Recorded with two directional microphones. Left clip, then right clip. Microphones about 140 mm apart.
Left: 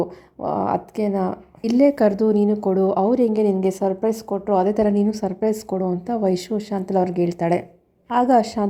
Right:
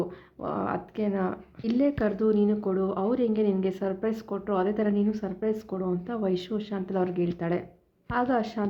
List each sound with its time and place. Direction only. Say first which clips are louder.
0.4 s a woman's voice: left 9 dB; 35° left (ahead or behind)